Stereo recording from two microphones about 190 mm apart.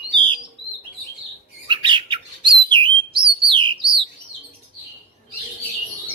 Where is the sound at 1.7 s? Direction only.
25° right (ahead or behind).